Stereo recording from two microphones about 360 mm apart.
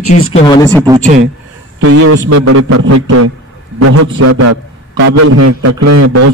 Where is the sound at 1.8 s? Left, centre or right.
Right.